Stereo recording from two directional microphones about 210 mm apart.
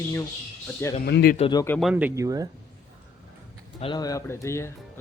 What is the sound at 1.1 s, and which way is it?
Speech, 50° left (ahead or behind).